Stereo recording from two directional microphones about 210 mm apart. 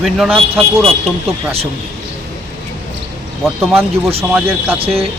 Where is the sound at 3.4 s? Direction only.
5° right (ahead or behind).